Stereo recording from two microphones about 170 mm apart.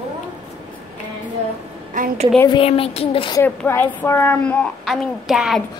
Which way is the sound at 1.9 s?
55° right (ahead or behind).